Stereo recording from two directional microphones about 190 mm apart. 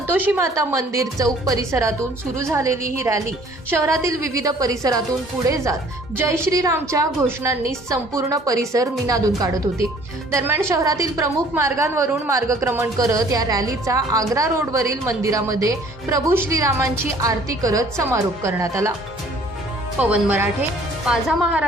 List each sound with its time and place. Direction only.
0.1 s a woman's voice: 10° right (ahead or behind)
20.0 s a woman's voice: 10° right (ahead or behind)